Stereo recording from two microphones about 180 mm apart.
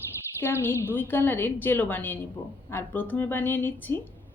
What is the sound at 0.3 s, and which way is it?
Speech, 15° left (ahead or behind).